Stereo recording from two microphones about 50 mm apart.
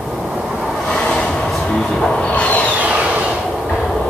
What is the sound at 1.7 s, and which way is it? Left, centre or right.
Speech, centre.